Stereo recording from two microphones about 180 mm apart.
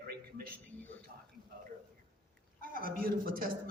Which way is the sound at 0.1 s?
60° right (ahead or behind).